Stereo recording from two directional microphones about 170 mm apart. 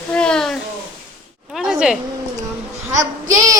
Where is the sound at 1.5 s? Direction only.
5° right (ahead or behind).